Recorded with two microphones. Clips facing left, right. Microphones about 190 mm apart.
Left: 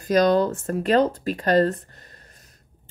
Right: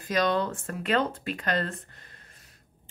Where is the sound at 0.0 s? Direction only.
40° left (ahead or behind).